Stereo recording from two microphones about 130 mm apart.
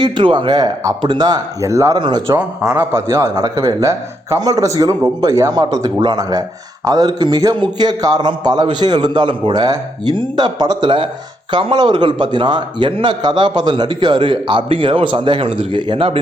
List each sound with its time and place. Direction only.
0.0 s a man's voice: 40° right (ahead or behind); by 2.0 s 25° right (ahead or behind)
2.0 s a man's voice: 35° right (ahead or behind)
2.9 s a man's voice: 20° right (ahead or behind); by 16.2 s 45° right (ahead or behind)